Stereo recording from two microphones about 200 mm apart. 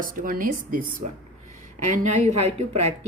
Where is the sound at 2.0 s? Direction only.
35° right (ahead or behind).